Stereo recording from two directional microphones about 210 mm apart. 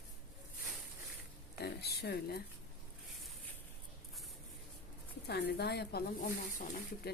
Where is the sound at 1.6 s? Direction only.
50° left (ahead or behind).